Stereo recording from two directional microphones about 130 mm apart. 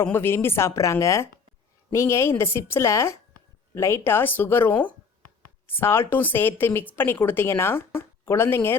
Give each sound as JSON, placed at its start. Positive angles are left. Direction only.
{"t": 0.0, "sound": "a woman's voice", "side_deg": 15}